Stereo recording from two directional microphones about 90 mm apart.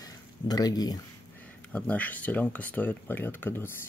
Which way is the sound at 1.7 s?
15° left (ahead or behind).